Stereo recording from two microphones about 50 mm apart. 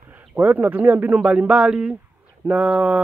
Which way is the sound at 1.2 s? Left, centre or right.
Right.